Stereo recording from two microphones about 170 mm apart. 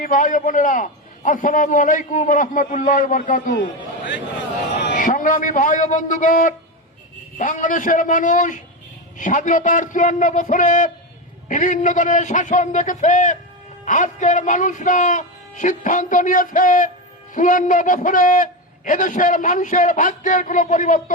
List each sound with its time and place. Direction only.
0.0 s a man's voice: 50° left (ahead or behind)
3.5 s a man's voice: 90° left
4.9 s a man's voice: 50° left (ahead or behind)